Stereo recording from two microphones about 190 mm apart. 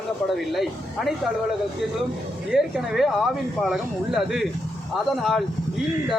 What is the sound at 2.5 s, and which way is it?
Speech, 5° right (ahead or behind).